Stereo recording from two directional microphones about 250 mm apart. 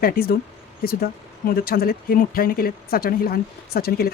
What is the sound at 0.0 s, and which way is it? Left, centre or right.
Speech, left.